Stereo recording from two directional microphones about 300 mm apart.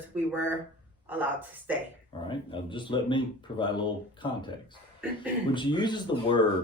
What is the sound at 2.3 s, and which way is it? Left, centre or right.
Speech, centre.